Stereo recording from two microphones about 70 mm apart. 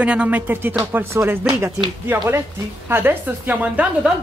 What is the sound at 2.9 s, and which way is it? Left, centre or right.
Speech, right.